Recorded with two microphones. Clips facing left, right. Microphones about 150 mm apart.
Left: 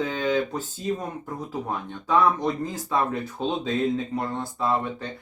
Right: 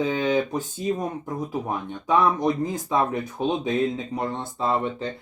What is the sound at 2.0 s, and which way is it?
Speech, 15° right (ahead or behind).